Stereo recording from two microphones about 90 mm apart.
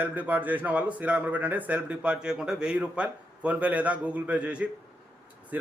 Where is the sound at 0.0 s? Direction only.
20° right (ahead or behind).